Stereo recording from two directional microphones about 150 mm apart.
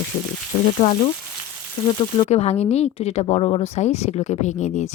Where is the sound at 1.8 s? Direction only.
25° left (ahead or behind).